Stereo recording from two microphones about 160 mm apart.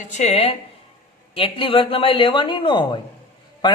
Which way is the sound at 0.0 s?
45° left (ahead or behind).